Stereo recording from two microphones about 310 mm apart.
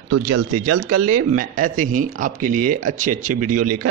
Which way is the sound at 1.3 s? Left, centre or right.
Right.